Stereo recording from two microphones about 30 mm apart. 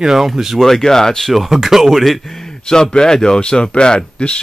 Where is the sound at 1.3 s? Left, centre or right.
Centre.